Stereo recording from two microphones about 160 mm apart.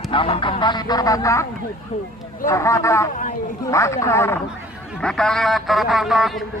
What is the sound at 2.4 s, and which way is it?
Speech, 20° left (ahead or behind).